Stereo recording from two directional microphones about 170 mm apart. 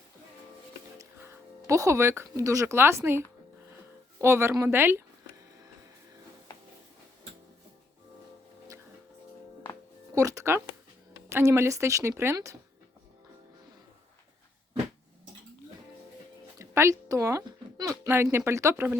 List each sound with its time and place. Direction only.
0.9 s speech: 15° right (ahead or behind)
10.2 s music: 20° right (ahead or behind)
11.3 s speech: 15° right (ahead or behind)
16.6 s speech: 15° right (ahead or behind)